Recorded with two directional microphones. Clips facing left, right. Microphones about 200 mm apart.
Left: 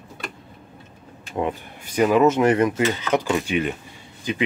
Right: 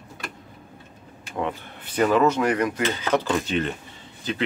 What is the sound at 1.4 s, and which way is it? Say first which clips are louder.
Speech: left 3 dB; 15° left (ahead or behind).